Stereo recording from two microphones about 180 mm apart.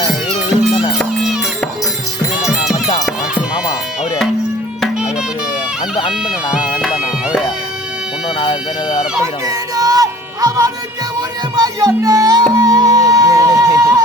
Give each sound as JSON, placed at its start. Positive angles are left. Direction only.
{"t": 0.7, "sound": "music", "side_deg": 35}
{"t": 0.9, "sound": "music", "side_deg": 0}
{"t": 4.8, "sound": "music", "side_deg": -5}
{"t": 6.2, "sound": "bagpipes", "side_deg": -5}
{"t": 8.4, "sound": "a sound", "side_deg": 30}
{"t": 9.2, "sound": "music", "side_deg": -20}